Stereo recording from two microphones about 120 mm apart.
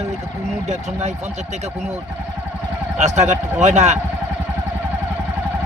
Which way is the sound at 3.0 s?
75° right (ahead or behind).